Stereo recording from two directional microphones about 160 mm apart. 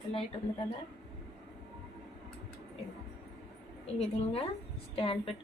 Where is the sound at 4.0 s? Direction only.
40° left (ahead or behind).